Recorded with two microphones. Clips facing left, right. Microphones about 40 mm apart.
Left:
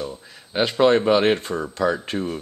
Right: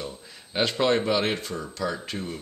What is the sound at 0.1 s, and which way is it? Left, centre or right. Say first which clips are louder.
Speech: left 4 dB; centre.